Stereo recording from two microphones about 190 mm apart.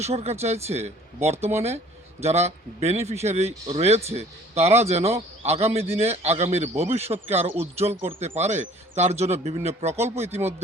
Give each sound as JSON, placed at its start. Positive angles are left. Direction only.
{"t": 0.0, "sound": "speech", "side_deg": -35}